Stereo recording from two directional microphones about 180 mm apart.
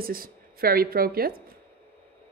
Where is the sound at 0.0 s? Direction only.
55° right (ahead or behind).